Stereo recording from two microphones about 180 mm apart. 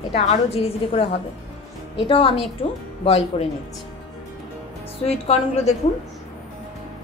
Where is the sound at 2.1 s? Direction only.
30° left (ahead or behind).